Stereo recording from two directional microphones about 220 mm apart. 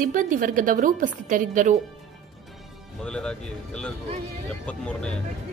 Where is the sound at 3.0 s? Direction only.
5° left (ahead or behind).